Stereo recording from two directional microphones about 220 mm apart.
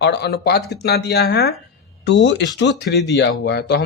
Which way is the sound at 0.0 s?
50° left (ahead or behind).